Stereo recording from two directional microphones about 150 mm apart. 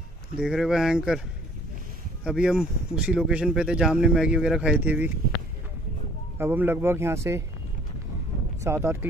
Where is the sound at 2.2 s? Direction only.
5° right (ahead or behind).